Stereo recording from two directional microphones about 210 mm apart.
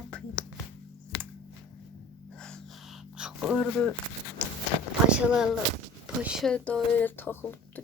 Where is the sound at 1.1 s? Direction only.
50° left (ahead or behind).